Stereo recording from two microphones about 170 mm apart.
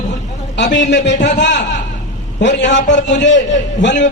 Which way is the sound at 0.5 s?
90° left.